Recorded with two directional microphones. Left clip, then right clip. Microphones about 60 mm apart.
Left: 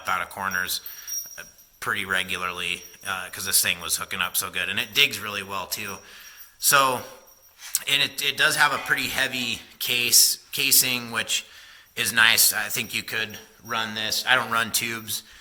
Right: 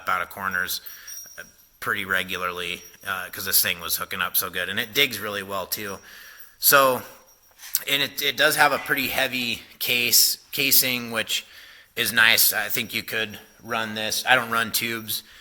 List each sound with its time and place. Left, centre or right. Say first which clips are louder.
0.0 s speech: right 1 dB; centre
0.3 s speech: even; centre; by 6.0 s right
6.7 s speech: right 2 dB; right
14.4 s speech: even; centre